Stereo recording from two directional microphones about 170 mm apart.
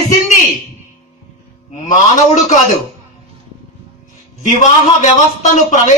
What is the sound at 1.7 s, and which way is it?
Speech, 45° left (ahead or behind).